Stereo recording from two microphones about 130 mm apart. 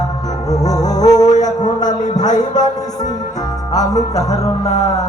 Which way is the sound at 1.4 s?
30° left (ahead or behind).